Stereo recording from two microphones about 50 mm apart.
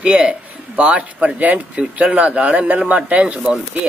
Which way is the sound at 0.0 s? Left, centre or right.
Right.